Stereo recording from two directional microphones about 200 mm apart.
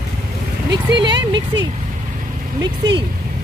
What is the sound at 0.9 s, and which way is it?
Speech, 25° right (ahead or behind).